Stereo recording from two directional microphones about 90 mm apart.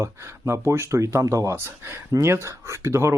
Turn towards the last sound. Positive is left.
turn(degrees=-30)  # may be behind; listen again after turning